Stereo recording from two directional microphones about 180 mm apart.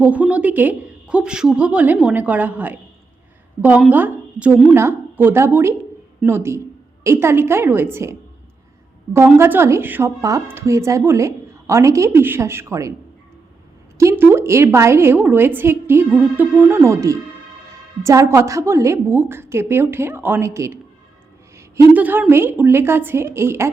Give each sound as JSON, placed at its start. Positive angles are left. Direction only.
{"t": 0.0, "sound": "a woman's voice", "side_deg": -10}
{"t": 9.1, "sound": "a woman's voice", "side_deg": -15}
{"t": 14.0, "sound": "a woman's voice", "side_deg": -15}
{"t": 21.9, "sound": "a woman's voice", "side_deg": -10}